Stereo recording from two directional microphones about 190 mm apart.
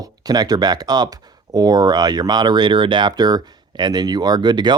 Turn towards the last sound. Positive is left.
turn(degrees=-20)  # may be behind; listen again after turning